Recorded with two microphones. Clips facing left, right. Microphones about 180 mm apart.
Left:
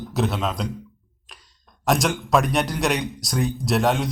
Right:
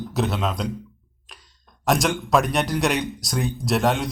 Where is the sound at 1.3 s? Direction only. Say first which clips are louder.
Even; centre (ahead or behind).